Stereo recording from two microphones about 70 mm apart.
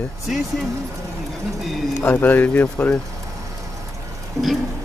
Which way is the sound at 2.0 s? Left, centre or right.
Left.